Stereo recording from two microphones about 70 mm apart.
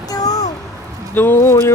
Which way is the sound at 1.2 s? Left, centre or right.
Left.